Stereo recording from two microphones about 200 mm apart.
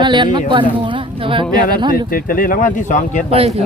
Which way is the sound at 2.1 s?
45° left (ahead or behind).